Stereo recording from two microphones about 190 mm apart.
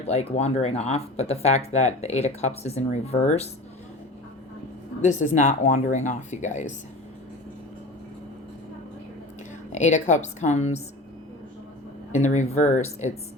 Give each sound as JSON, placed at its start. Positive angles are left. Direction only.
{"t": 0.1, "sound": "speech", "side_deg": 35}
{"t": 5.0, "sound": "speech", "side_deg": 40}
{"t": 9.7, "sound": "speech", "side_deg": 40}
{"t": 12.1, "sound": "speech", "side_deg": 40}